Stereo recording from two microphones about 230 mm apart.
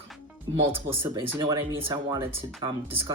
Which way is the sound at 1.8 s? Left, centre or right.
Centre.